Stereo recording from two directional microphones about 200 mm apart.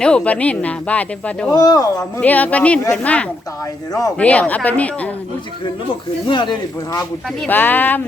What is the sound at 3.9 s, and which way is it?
Speech, 15° left (ahead or behind).